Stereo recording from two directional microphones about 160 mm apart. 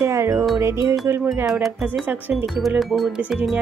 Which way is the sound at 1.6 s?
5° right (ahead or behind).